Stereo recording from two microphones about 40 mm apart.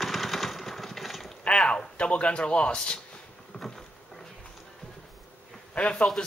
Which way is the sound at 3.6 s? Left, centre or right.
Centre.